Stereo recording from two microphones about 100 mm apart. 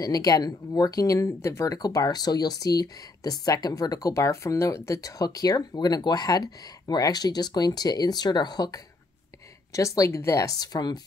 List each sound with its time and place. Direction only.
0.0 s speech: 40° left (ahead or behind)